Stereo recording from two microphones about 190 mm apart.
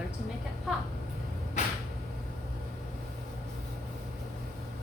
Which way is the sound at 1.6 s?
40° left (ahead or behind).